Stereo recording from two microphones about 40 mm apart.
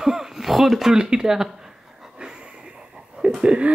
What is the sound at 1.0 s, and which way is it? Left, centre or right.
Speech, centre.